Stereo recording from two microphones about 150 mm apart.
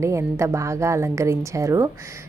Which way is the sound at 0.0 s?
20° right (ahead or behind).